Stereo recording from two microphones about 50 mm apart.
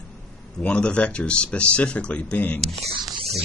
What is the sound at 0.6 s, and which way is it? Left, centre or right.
A man's voice, left.